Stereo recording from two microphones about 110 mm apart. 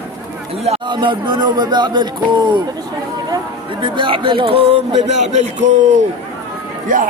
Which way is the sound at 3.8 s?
50° right (ahead or behind).